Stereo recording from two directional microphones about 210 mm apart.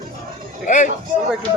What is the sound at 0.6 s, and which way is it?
Speech, 35° left (ahead or behind).